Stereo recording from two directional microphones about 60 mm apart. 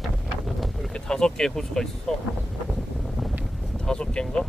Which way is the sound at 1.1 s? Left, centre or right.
Centre.